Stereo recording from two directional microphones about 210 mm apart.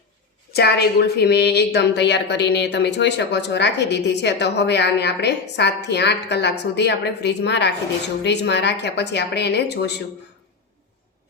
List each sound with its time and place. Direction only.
0.5 s a woman's voice: 50° left (ahead or behind)